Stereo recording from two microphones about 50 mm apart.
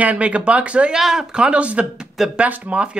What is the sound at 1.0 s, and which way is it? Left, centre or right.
Speech, centre.